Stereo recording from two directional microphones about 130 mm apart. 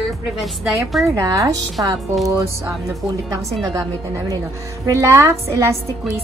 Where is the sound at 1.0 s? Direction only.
25° right (ahead or behind).